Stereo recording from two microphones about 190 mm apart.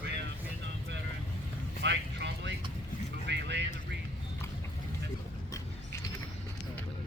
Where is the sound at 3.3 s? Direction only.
65° right (ahead or behind).